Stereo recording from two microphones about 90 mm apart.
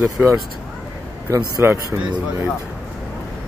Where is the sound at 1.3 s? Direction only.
35° right (ahead or behind).